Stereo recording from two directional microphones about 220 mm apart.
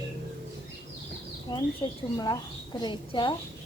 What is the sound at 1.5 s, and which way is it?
A woman's voice, 20° left (ahead or behind).